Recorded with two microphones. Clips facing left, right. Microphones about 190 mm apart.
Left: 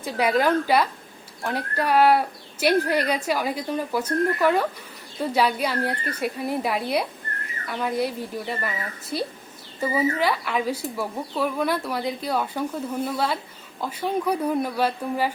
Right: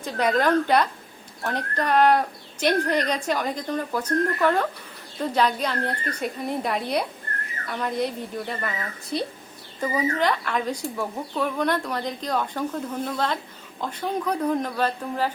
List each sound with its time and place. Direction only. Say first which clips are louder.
0.0 s a woman's voice: left 1 dB; 10° left (ahead or behind)